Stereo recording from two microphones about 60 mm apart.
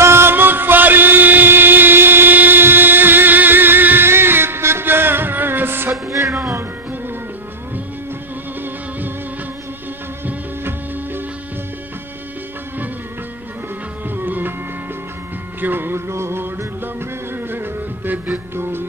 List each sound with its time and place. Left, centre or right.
0.0 s music: right
6.0 s music: right
14.1 s music: right
15.6 s music: right
16.1 s music: right